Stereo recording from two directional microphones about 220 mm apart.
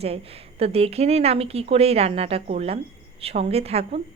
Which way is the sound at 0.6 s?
25° right (ahead or behind).